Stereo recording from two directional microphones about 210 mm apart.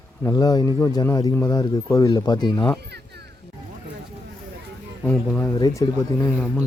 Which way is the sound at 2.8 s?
50° right (ahead or behind).